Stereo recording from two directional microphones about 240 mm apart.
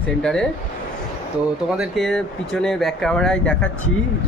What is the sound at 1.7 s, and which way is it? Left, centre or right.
Speech, centre.